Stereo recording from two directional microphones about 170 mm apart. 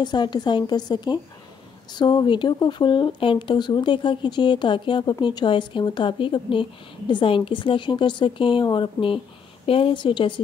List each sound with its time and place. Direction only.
0.0 s speech: 25° left (ahead or behind)